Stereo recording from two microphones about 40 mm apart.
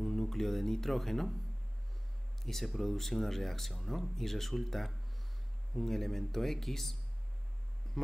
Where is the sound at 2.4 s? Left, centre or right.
Centre.